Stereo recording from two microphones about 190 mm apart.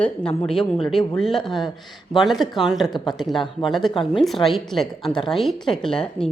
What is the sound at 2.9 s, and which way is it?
Speech, 20° left (ahead or behind).